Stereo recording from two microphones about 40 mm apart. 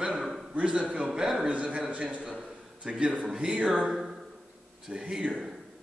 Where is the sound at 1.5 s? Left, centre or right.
Right.